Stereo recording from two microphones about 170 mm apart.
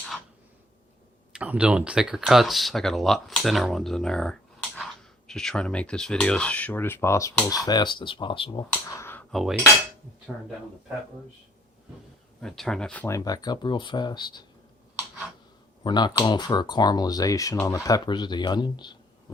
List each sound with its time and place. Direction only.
1.3 s speech: 5° right (ahead or behind); by 8.6 s 30° left (ahead or behind)
8.7 s speech: 15° left (ahead or behind)
9.3 s speech: centre (ahead or behind)
12.4 s speech: 5° left (ahead or behind)
13.1 s speech: 20° left (ahead or behind)
15.8 s speech: 25° left (ahead or behind)